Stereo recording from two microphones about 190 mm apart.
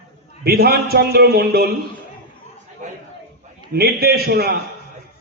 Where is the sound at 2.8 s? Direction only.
40° right (ahead or behind).